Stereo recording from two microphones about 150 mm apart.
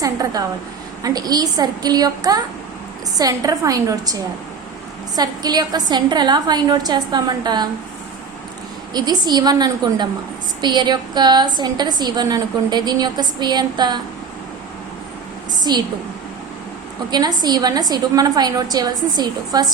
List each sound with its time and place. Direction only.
0.0 s a woman's voice: 25° right (ahead or behind)
8.9 s a woman's voice: 25° right (ahead or behind)
15.5 s a woman's voice: 30° right (ahead or behind)
17.1 s a woman's voice: 25° right (ahead or behind)